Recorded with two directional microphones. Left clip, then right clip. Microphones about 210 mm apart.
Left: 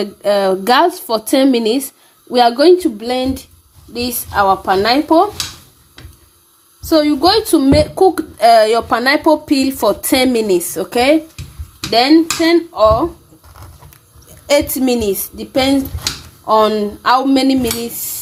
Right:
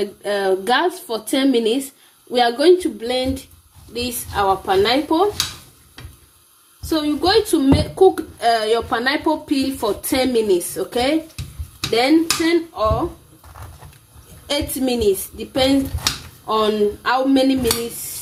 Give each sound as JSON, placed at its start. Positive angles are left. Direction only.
{"t": 0.0, "sound": "a woman's voice", "side_deg": 40}
{"t": 6.9, "sound": "a woman's voice", "side_deg": 40}
{"t": 14.4, "sound": "a woman's voice", "side_deg": 40}
{"t": 16.5, "sound": "a woman's voice", "side_deg": 40}